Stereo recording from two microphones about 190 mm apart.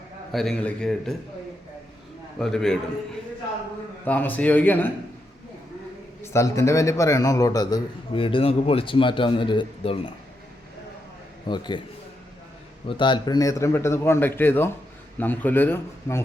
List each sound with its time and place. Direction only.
0.3 s a man's voice: centre (ahead or behind)
2.4 s a man's voice: centre (ahead or behind)
4.0 s speech: 10° left (ahead or behind)
6.2 s a man's voice: 15° left (ahead or behind)
11.4 s a man's voice: 25° left (ahead or behind)
12.9 s speech: 25° left (ahead or behind)